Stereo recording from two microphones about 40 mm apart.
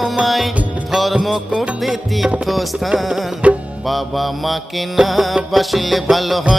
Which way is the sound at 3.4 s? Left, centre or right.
Right.